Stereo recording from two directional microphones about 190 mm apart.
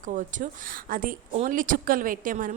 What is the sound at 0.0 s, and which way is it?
A woman's voice, 45° right (ahead or behind).